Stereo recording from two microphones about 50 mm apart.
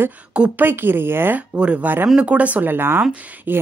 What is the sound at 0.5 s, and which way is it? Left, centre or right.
Speech, right.